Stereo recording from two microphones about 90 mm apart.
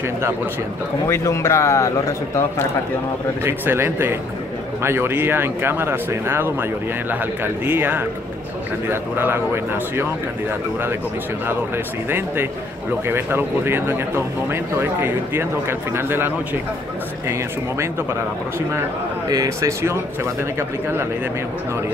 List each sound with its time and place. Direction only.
1.0 s speech: 30° left (ahead or behind)
3.4 s speech: 25° right (ahead or behind)
11.4 s speech: 25° right (ahead or behind)
19.2 s speech: 45° right (ahead or behind)
20.5 s speech: 25° right (ahead or behind)